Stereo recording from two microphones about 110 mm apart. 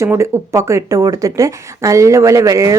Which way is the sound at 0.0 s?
25° right (ahead or behind).